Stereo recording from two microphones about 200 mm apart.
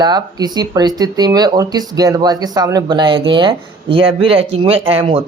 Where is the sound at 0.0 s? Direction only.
20° right (ahead or behind).